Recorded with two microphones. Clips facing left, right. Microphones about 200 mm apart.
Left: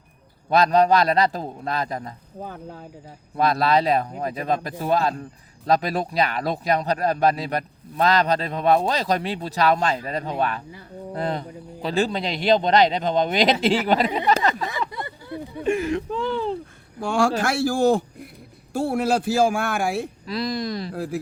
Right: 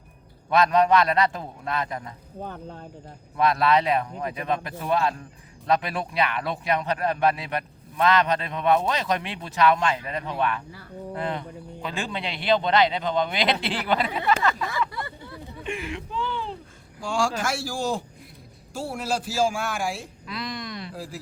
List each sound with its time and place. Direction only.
0.5 s a man's voice: 35° left (ahead or behind)
2.4 s speech: 5° left (ahead or behind)
3.3 s a man's voice: 35° left (ahead or behind)
14.7 s speech: 20° left (ahead or behind)
15.6 s a man's voice: 40° left (ahead or behind)
17.0 s a man's voice: 60° left (ahead or behind)
20.2 s a man's voice: 35° left (ahead or behind)
20.9 s a man's voice: 60° left (ahead or behind)